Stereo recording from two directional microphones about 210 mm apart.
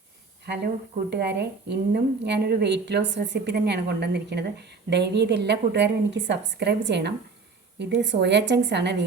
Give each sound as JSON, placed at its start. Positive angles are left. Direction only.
{"t": 0.4, "sound": "a woman's voice", "side_deg": -55}